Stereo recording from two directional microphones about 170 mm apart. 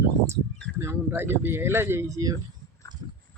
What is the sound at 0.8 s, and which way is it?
Speech, 15° right (ahead or behind).